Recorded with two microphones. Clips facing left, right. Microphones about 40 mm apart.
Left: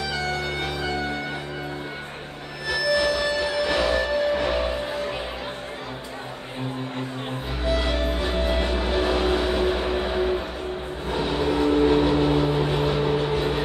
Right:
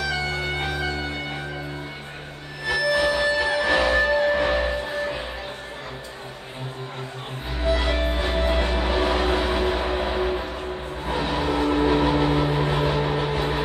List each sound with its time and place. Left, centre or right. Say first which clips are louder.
2.7 s a sound: right 1 dB; centre
7.7 s music: even; right
9.8 s vehicle: even; centre
11.1 s train: even; right
12.4 s music: even; right